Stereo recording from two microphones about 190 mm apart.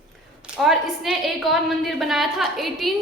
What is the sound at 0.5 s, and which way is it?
A woman's voice, centre (ahead or behind).